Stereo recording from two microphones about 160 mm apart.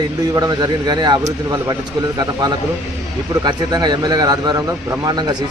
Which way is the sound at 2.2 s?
25° right (ahead or behind).